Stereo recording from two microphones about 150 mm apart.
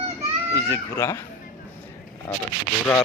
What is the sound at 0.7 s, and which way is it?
Speech, 20° left (ahead or behind).